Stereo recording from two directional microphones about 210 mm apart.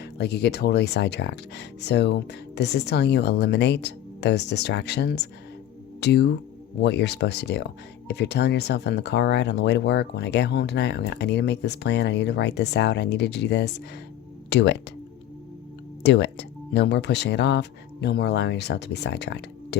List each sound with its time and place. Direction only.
0.0 s speech: 50° left (ahead or behind)
16.0 s speech: 55° left (ahead or behind)